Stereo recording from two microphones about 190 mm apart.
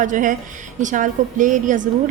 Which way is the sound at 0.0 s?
45° right (ahead or behind).